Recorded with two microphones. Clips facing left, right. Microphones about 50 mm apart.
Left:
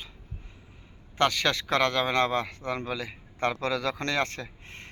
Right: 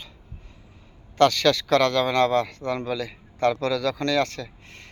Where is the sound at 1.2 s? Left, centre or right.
Centre.